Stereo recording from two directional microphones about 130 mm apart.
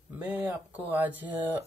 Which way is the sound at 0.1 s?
15° right (ahead or behind).